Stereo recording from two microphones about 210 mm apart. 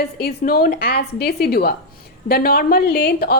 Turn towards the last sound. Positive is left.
turn(degrees=50)  # may be behind; listen again after turning